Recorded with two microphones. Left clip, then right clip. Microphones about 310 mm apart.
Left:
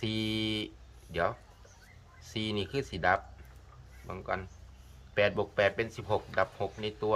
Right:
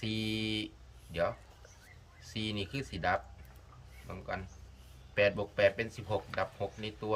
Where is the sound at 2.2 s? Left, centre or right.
Centre.